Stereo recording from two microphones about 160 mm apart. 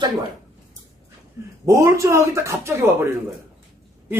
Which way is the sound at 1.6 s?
20° right (ahead or behind).